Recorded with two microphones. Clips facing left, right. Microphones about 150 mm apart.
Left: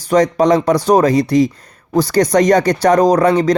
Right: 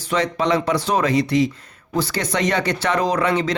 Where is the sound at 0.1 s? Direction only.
40° left (ahead or behind).